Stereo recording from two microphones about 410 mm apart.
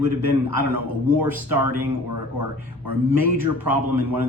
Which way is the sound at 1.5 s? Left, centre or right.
Right.